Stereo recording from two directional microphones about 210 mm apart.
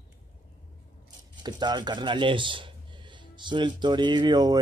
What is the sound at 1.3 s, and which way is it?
Speech, 20° right (ahead or behind).